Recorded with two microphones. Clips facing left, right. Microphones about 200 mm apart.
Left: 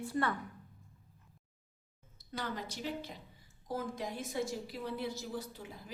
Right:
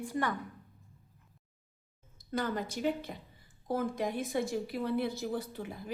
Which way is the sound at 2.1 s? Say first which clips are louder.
Right 7 dB; 50° right (ahead or behind).